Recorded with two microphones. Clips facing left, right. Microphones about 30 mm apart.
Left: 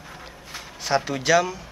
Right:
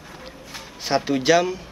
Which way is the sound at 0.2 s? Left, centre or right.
Centre.